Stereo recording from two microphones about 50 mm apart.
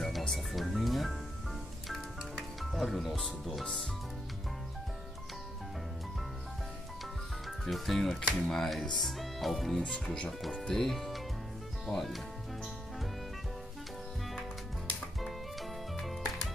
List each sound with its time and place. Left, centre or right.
0.3 s music: centre
2.6 s music: centre
7.4 s speech: centre
9.8 s speech: centre
10.7 s speech: centre